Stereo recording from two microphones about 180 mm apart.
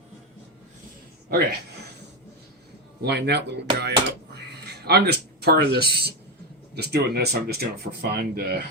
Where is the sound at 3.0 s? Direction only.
65° right (ahead or behind).